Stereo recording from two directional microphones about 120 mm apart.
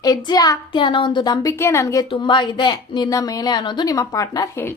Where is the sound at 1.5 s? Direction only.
20° left (ahead or behind).